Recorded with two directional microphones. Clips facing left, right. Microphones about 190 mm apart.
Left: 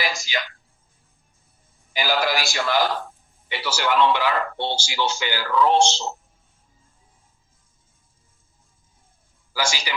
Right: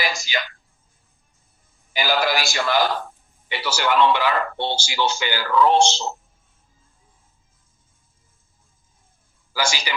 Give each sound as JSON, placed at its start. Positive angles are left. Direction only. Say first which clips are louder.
{"t": 0.0, "sound": "a woman's voice", "louder": "right 1 dB", "side_deg": -60}
{"t": 1.9, "sound": "speech", "louder": "right 1 dB", "side_deg": -60}
{"t": 9.6, "sound": "speech", "louder": "right 1 dB", "side_deg": -60}